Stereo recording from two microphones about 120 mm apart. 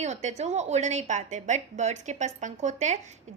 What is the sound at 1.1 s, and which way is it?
A woman's voice, 85° right.